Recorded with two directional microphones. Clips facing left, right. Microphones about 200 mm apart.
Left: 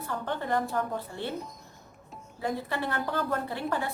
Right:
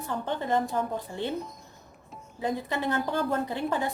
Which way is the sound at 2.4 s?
15° right (ahead or behind).